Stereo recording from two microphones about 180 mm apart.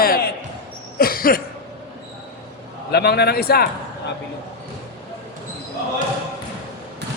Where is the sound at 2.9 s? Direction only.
65° left (ahead or behind).